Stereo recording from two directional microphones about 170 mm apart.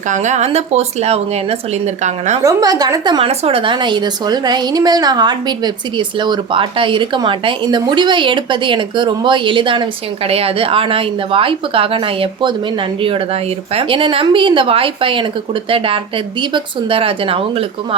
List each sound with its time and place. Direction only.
0.1 s a woman's voice: 45° right (ahead or behind)
2.4 s a woman's voice: 20° right (ahead or behind)